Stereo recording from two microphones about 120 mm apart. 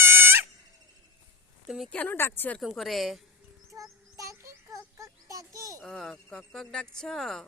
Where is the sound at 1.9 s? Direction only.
15° left (ahead or behind).